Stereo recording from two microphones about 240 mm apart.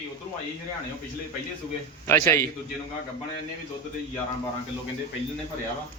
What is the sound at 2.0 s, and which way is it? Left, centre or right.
Speech, centre.